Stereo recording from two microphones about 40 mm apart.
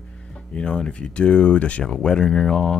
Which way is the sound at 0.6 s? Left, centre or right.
Left.